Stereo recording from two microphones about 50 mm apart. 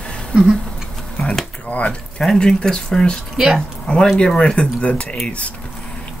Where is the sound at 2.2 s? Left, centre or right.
Centre.